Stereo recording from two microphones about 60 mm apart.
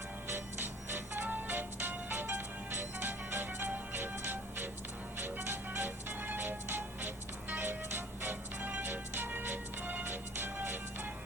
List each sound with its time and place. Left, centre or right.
0.3 s music: right